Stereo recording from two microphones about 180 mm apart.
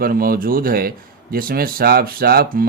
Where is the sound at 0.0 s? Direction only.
55° right (ahead or behind).